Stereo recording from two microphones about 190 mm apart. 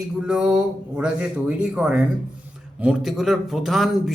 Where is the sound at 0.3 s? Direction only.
5° right (ahead or behind).